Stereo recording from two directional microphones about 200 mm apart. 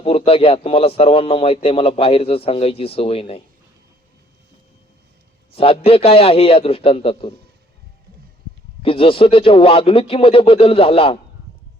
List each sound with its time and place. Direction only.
0.0 s a man's voice: 30° left (ahead or behind)
5.5 s a man's voice: 30° left (ahead or behind)
8.8 s a man's voice: 30° left (ahead or behind)